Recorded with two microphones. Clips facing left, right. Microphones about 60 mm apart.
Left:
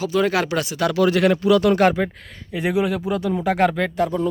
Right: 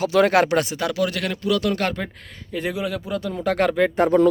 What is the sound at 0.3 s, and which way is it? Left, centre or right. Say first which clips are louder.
Speech: right 3 dB; right.